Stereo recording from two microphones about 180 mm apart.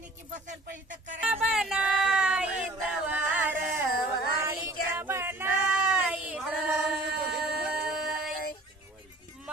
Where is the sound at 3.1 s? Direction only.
10° right (ahead or behind).